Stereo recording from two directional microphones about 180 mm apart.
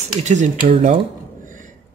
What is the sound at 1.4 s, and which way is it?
Beatboxing, 45° right (ahead or behind).